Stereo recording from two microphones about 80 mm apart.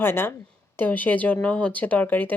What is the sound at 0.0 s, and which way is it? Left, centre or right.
Speech, left.